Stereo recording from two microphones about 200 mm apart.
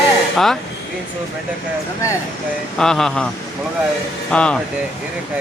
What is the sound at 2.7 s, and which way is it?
A man's voice, 5° left (ahead or behind).